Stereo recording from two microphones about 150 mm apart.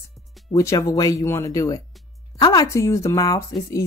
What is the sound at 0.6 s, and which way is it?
Speech, 20° left (ahead or behind).